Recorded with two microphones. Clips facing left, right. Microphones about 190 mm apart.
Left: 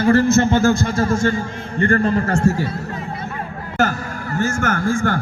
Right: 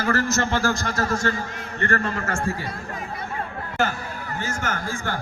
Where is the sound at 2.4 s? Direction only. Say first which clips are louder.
Left 10 dB; 45° left (ahead or behind).